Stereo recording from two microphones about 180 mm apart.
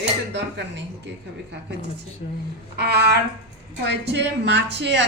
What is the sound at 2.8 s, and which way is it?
A woman's voice, 65° right (ahead or behind).